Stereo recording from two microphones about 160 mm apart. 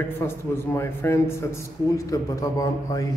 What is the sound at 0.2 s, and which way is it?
Mantra, 15° left (ahead or behind).